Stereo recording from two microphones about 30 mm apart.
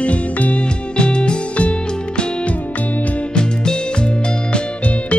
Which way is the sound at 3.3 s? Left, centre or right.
Left.